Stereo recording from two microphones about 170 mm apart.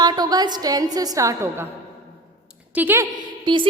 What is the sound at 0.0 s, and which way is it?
A woman's voice, 25° right (ahead or behind).